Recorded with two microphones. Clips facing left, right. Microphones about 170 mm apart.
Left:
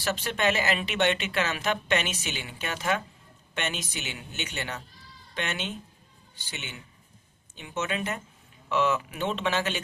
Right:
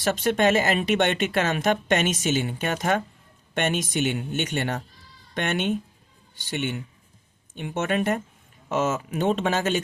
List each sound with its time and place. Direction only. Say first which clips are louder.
0.0 s speech: right 6 dB; 50° right (ahead or behind)